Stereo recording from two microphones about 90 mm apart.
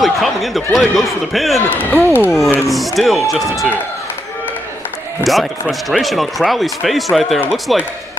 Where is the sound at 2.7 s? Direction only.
Centre (ahead or behind).